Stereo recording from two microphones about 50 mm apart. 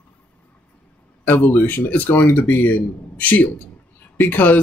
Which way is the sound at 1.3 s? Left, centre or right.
Left.